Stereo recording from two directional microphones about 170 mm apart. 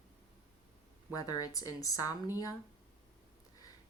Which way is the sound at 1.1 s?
20° left (ahead or behind).